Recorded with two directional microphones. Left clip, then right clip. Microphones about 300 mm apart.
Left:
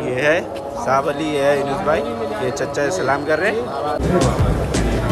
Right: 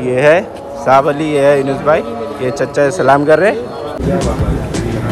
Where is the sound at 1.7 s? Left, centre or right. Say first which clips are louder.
Right 6 dB; centre.